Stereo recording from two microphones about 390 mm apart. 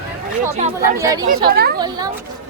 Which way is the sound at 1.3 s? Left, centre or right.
Right.